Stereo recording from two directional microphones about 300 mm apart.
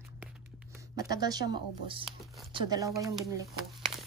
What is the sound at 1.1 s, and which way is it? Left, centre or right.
Speech, centre.